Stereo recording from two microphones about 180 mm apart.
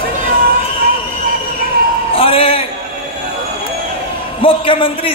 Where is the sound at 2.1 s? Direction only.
30° left (ahead or behind).